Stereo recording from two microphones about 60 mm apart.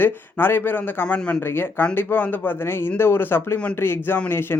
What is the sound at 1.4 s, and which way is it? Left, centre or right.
A man's voice, left.